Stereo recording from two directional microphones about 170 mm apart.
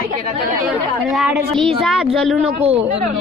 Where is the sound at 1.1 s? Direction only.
Centre (ahead or behind).